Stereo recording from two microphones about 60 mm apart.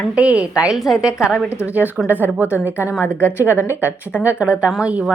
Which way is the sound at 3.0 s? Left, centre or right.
Left.